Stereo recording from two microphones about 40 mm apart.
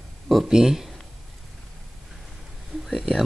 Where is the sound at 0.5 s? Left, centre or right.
Centre.